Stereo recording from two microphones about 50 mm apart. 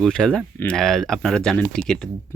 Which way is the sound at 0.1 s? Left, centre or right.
Centre.